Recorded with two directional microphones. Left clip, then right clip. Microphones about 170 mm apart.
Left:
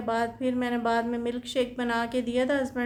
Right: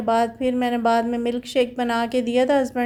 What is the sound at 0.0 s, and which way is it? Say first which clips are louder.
Speech: right 8 dB; 35° right (ahead or behind).